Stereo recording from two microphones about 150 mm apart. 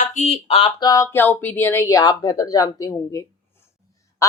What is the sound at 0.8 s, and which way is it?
Speech, 25° left (ahead or behind).